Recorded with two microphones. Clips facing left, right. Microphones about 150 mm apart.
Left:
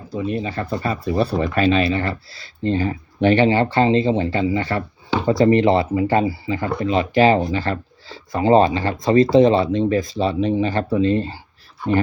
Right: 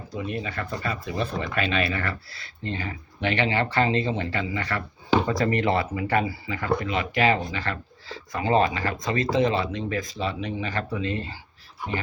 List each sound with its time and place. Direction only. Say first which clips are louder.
0.1 s speech: left 7 dB; 30° left (ahead or behind)